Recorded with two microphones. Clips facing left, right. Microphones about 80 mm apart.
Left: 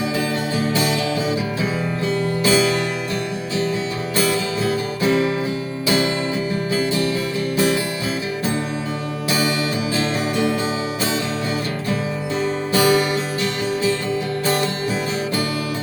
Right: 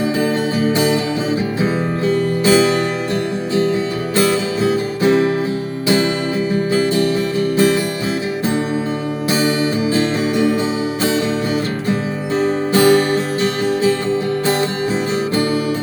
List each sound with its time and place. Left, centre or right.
1.6 s music: right
4.2 s music: right
7.5 s music: right
9.9 s music: right
12.4 s music: right